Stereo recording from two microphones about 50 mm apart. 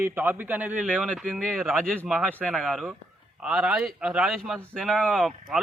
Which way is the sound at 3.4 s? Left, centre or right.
Centre.